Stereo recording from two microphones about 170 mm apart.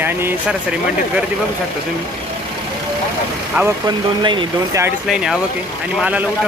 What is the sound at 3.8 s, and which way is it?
Speech, 25° right (ahead or behind).